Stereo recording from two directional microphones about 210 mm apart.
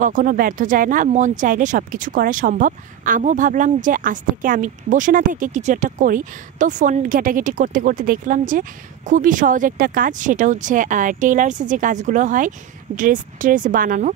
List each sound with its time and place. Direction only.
0.0 s speech: 40° right (ahead or behind)